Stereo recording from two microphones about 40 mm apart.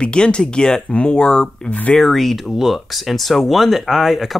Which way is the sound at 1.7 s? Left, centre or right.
Left.